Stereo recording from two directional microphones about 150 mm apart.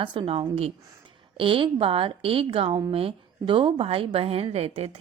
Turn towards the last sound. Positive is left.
turn(degrees=-45)  # may be behind; listen again after turning